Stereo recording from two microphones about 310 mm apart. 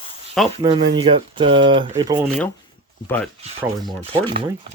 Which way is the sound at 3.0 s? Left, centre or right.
Centre.